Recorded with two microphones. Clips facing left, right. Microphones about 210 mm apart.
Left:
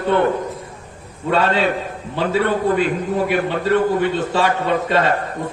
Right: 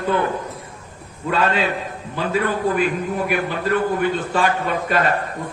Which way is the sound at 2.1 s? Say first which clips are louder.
Left 3 dB; 30° left (ahead or behind).